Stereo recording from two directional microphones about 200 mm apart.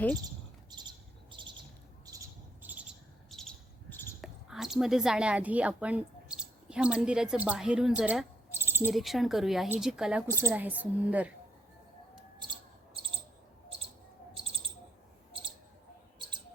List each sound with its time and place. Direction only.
0.7 s bird: 20° right (ahead or behind)
2.0 s cricket: 15° right (ahead or behind)
3.2 s bird: centre (ahead or behind)
4.2 s a woman's voice: centre (ahead or behind)
8.9 s a woman's voice: centre (ahead or behind)
13.7 s a sound: 30° right (ahead or behind)
15.3 s a sound: 25° right (ahead or behind)